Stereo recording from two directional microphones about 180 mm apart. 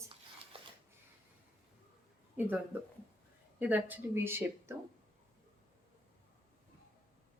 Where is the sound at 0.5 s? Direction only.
30° right (ahead or behind).